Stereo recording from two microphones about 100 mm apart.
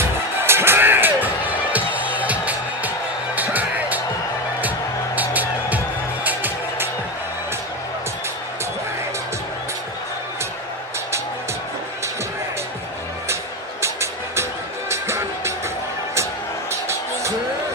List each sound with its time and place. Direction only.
0.0 s music: 25° right (ahead or behind)
5.1 s music: 15° right (ahead or behind)
13.8 s music: 25° right (ahead or behind)